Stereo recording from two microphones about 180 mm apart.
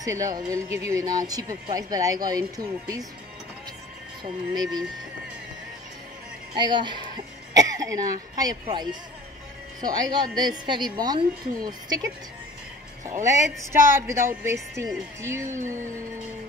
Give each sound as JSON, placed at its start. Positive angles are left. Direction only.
{"t": 0.0, "sound": "a woman's voice", "side_deg": -20}
{"t": 4.2, "sound": "a woman's voice", "side_deg": -20}
{"t": 6.6, "sound": "a woman's voice", "side_deg": -25}
{"t": 13.0, "sound": "a woman's voice", "side_deg": -15}